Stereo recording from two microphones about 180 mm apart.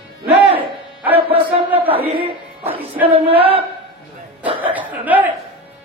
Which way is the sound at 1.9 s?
30° right (ahead or behind).